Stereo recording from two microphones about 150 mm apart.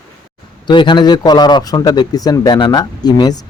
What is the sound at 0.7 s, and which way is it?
Speech, 30° left (ahead or behind).